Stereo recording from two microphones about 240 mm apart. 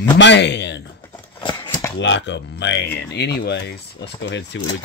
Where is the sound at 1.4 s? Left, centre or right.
Centre.